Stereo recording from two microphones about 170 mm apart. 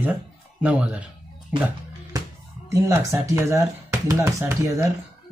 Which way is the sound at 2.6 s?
20° right (ahead or behind).